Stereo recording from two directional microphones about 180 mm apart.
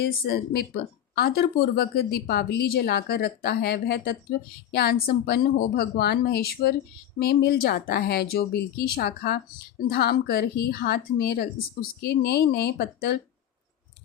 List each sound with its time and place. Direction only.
0.0 s a woman's voice: 55° left (ahead or behind)